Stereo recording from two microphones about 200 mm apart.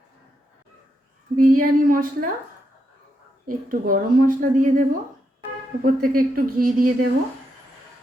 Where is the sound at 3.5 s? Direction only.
45° right (ahead or behind).